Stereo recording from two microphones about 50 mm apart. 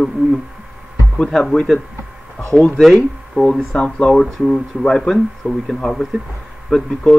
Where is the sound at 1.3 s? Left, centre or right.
Centre.